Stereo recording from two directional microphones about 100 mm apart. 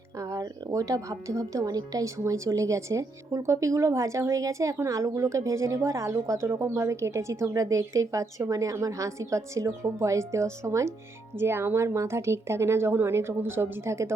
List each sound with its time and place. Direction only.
0.2 s a woman's voice: 35° right (ahead or behind)